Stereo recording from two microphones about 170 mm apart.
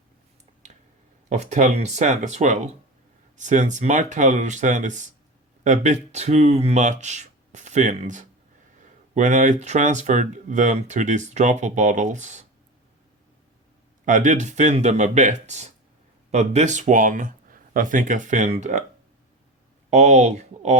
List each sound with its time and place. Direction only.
1.3 s speech: 45° right (ahead or behind)
14.0 s speech: 50° right (ahead or behind)
19.9 s speech: 45° right (ahead or behind)